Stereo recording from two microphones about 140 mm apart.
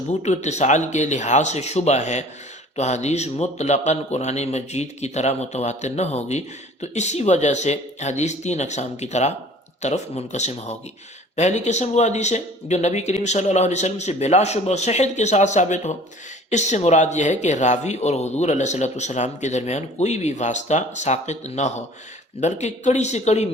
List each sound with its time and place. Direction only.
0.1 s a man's voice: 55° left (ahead or behind)